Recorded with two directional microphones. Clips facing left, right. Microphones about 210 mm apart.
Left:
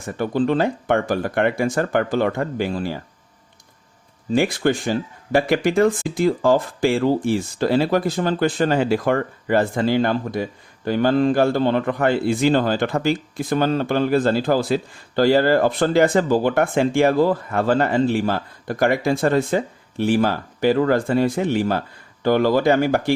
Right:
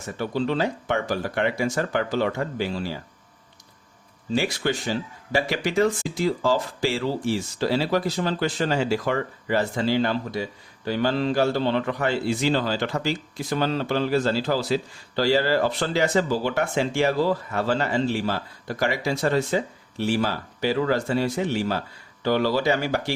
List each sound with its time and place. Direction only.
0.2 s speech: 50° left (ahead or behind)
4.3 s speech: 55° left (ahead or behind)